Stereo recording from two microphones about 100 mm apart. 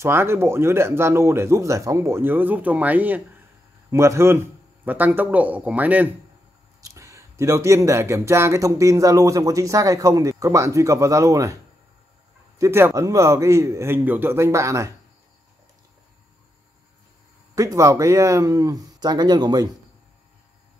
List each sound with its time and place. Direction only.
0.0 s speech: 25° right (ahead or behind)
3.9 s a man's voice: 30° right (ahead or behind)
6.8 s speech: 30° right (ahead or behind)
12.5 s speech: 30° right (ahead or behind)
17.6 s speech: 35° right (ahead or behind)